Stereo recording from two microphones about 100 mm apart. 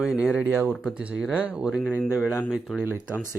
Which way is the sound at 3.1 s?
20° left (ahead or behind).